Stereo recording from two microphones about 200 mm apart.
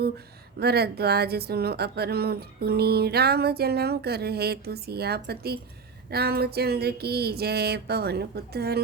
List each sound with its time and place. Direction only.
0.6 s speech: 55° right (ahead or behind)